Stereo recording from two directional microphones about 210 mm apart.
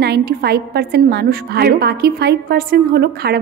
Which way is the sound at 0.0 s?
50° right (ahead or behind).